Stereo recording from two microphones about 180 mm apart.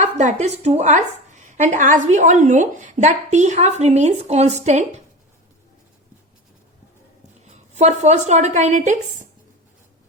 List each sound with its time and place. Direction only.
0.0 s a woman's voice: 40° right (ahead or behind)
7.8 s a woman's voice: 40° right (ahead or behind)